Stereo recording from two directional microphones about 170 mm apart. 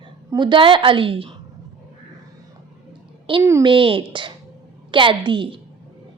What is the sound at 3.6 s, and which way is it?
A woman's voice, 30° right (ahead or behind).